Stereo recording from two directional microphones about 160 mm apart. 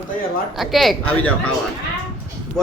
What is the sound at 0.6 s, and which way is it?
Speech, centre (ahead or behind).